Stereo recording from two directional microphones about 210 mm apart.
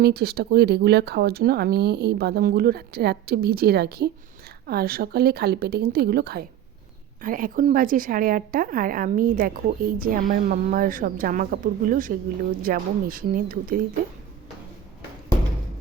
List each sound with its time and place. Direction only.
0.0 s a woman's voice: 50° right (ahead or behind)